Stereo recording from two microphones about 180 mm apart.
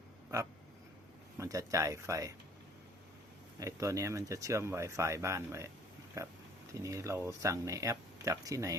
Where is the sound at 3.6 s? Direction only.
15° right (ahead or behind).